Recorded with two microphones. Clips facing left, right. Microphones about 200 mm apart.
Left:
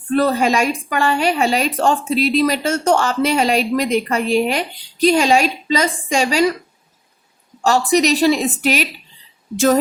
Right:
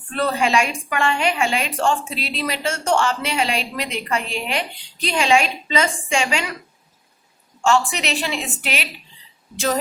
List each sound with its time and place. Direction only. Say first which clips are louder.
0.1 s a woman's voice: left 5 dB; 40° left (ahead or behind)
7.6 s a woman's voice: left 5 dB; 40° left (ahead or behind)